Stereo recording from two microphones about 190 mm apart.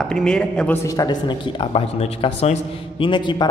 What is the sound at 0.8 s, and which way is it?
Speech, 20° left (ahead or behind).